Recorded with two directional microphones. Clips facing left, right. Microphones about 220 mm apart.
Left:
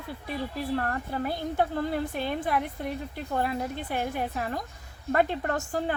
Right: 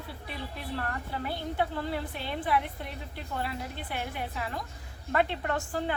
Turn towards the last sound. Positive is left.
turn(degrees=45)  # may be behind; listen again after turning